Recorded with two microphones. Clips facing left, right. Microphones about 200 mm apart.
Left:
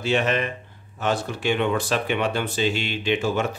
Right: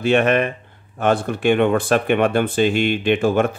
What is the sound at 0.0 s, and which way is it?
Speech, 55° right (ahead or behind).